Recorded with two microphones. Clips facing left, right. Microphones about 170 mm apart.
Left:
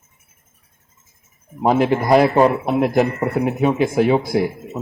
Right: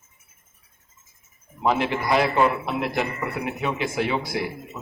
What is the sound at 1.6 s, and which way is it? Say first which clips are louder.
A man's voice: left 7 dB; 45° left (ahead or behind).